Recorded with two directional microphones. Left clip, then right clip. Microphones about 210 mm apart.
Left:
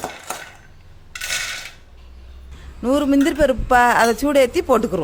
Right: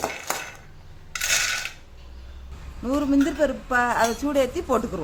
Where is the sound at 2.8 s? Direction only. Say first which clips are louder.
Left 6 dB; 45° left (ahead or behind).